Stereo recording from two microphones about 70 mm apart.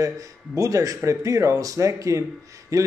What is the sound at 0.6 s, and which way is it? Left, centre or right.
Speech, right.